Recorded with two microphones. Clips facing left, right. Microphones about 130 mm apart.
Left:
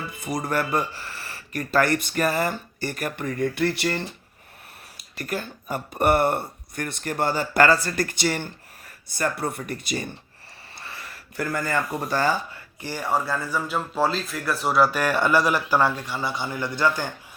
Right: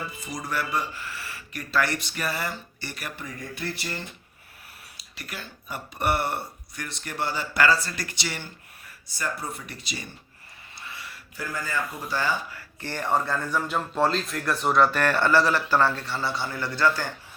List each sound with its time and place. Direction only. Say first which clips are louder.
0.2 s speech: left 7 dB; 60° left (ahead or behind)
0.9 s a sound: even; 30° left (ahead or behind)
1.5 s speech: left 5 dB; 45° left (ahead or behind); by 4.0 s 65° left (ahead or behind)
4.9 s speech: left 10 dB; 45° left (ahead or behind)
11.3 s speech: left 5 dB; 60° left (ahead or behind)
12.1 s speech: left 4 dB; 40° left (ahead or behind)
12.8 s speech: even; 10° left (ahead or behind)